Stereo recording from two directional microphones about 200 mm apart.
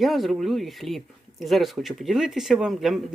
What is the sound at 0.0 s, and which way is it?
Speech, centre (ahead or behind).